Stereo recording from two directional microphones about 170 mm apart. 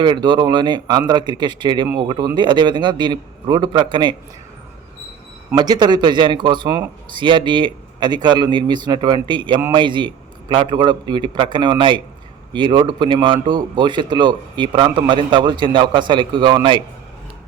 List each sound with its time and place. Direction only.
0.0 s a man's voice: 25° right (ahead or behind)
5.5 s a man's voice: 25° right (ahead or behind)